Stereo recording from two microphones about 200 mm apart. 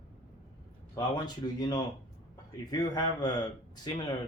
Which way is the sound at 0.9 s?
20° left (ahead or behind).